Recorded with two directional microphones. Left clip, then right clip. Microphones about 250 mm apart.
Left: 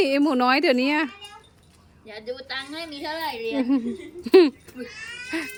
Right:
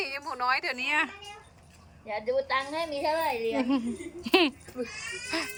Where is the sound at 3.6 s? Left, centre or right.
Centre.